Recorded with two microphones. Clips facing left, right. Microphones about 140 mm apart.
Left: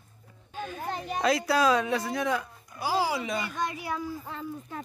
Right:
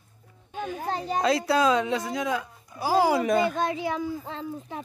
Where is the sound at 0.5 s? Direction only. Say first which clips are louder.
Right 4 dB; 20° right (ahead or behind).